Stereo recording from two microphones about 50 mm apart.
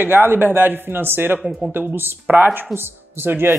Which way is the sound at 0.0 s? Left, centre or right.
Right.